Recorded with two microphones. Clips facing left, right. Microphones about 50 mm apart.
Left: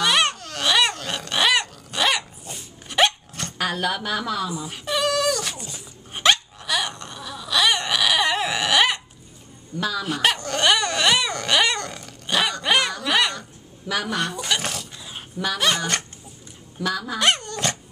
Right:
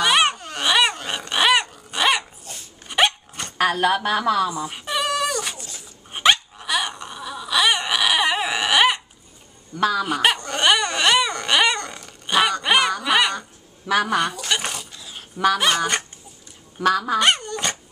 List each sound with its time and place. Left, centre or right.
0.0 s dog: centre
3.5 s a woman's voice: right
4.6 s dog: centre
6.1 s a sound: centre
9.8 s speech: right
10.0 s speech: centre
10.3 s dog: centre
13.8 s speech: right
14.5 s a sound: centre
15.3 s speech: right
15.6 s speech: centre
16.8 s speech: right
17.2 s dog: centre